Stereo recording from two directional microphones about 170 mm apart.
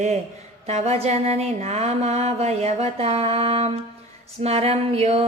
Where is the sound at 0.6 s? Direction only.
40° right (ahead or behind).